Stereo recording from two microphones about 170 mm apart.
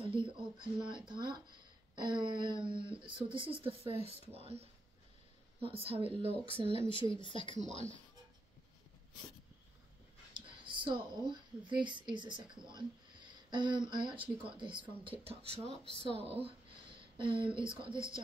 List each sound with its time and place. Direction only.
0.0 s speech: 30° right (ahead or behind)
6.9 s speech: 30° left (ahead or behind)
7.5 s speech: 45° right (ahead or behind)
10.3 s speech: 30° right (ahead or behind)